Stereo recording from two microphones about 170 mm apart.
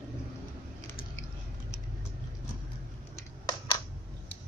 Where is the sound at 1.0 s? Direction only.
55° left (ahead or behind).